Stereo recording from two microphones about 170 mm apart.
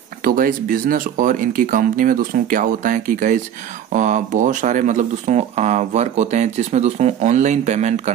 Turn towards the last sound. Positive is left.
turn(degrees=-45)  # may be behind; listen again after turning